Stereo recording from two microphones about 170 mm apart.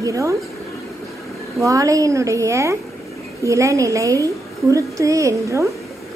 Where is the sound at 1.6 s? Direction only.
20° right (ahead or behind).